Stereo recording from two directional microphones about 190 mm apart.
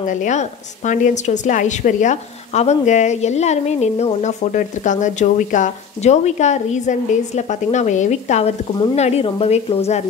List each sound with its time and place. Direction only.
0.0 s a woman's voice: 40° left (ahead or behind)